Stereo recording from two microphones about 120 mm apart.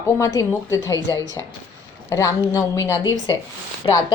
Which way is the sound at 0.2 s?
30° left (ahead or behind).